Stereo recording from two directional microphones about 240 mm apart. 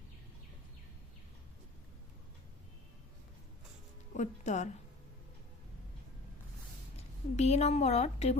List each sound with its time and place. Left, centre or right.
4.2 s a woman's voice: left
7.3 s a woman's voice: left